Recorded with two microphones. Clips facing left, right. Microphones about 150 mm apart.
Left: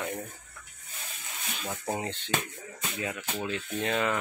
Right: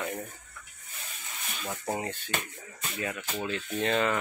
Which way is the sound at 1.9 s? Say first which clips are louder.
Left 2 dB; 20° left (ahead or behind).